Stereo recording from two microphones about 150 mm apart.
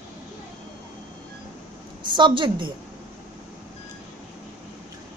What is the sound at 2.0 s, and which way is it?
Speech, 30° right (ahead or behind).